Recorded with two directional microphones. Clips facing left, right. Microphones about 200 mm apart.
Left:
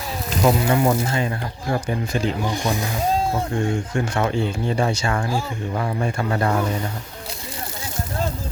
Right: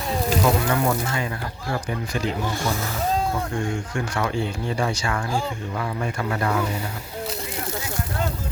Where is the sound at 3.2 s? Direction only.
25° left (ahead or behind).